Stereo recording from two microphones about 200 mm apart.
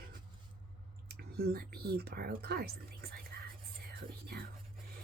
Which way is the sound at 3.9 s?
50° right (ahead or behind).